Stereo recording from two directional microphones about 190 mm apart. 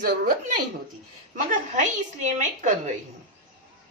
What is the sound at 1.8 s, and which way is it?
Speech, 40° right (ahead or behind).